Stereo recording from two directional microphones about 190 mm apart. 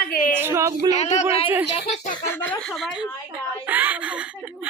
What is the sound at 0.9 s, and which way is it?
Speech, 35° left (ahead or behind).